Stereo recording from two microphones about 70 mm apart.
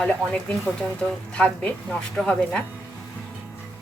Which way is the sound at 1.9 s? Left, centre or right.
Centre.